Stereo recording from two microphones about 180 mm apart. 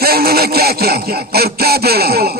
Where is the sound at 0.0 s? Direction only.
60° right (ahead or behind).